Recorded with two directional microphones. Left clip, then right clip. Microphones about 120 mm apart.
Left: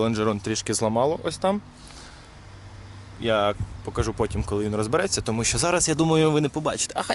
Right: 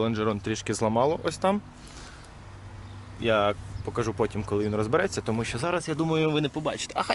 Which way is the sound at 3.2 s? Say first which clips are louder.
Left 1 dB; 10° left (ahead or behind).